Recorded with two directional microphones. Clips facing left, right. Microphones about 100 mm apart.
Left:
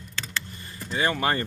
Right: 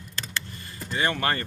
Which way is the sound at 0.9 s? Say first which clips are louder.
Left 1 dB; 10° left (ahead or behind).